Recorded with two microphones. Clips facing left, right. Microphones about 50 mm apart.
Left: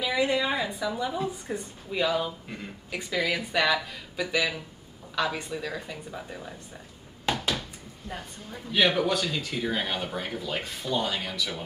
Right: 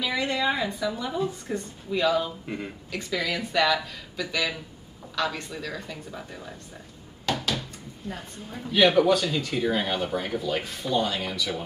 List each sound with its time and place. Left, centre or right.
0.0 s speech: centre
7.2 s a sound: centre
8.5 s speech: centre